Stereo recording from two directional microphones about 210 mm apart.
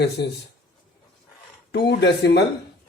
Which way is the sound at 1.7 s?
50° left (ahead or behind).